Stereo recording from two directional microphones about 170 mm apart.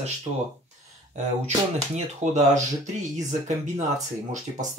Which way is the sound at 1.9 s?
45° right (ahead or behind).